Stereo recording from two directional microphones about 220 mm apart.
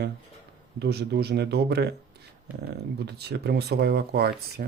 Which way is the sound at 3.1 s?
50° right (ahead or behind).